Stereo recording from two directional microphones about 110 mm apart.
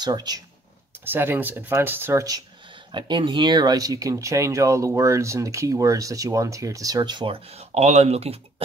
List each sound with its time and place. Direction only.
0.0 s speech: 40° right (ahead or behind)
1.0 s speech: 20° right (ahead or behind)
2.9 s speech: 45° right (ahead or behind); by 8.6 s 65° right (ahead or behind)